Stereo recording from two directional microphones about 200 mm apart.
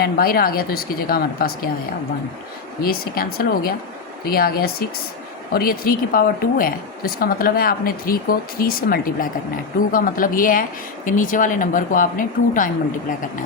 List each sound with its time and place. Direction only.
0.0 s speech: 45° left (ahead or behind)
2.8 s speech: 50° left (ahead or behind)